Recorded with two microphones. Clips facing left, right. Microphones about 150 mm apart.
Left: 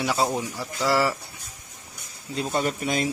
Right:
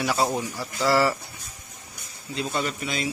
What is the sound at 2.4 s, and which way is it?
Speech, 45° left (ahead or behind).